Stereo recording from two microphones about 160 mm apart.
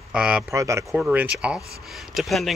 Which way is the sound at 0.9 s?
5° right (ahead or behind).